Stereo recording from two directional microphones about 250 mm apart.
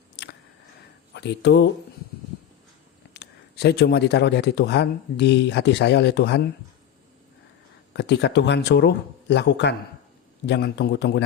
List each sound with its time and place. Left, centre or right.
0.2 s a sound: left
1.1 s speech: left
3.1 s speech: left
7.9 s speech: left